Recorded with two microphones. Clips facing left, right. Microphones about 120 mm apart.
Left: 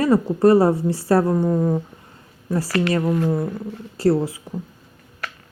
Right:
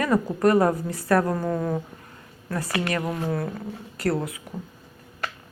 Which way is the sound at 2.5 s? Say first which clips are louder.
Left 6 dB; 25° left (ahead or behind).